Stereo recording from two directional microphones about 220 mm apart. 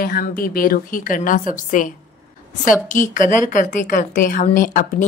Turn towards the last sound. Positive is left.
turn(degrees=40)  # may be behind; listen again after turning